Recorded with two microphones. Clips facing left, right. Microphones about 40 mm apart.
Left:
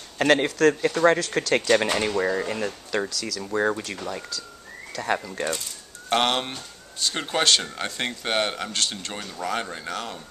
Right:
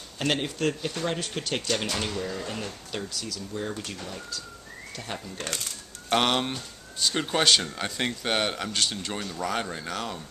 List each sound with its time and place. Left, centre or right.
0.2 s speech: left
1.9 s speech: left
2.4 s speech: left
4.9 s speech: left
6.0 s speech: centre